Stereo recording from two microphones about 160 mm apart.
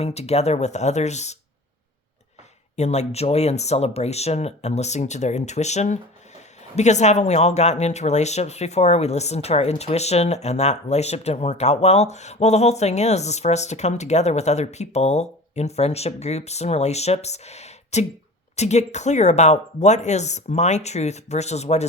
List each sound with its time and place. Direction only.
0.0 s speech: 40° left (ahead or behind)
2.7 s speech: 45° left (ahead or behind)